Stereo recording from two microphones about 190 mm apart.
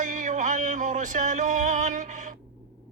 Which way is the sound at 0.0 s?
40° right (ahead or behind).